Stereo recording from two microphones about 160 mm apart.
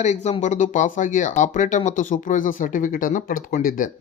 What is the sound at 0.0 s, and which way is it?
Speech, 45° left (ahead or behind).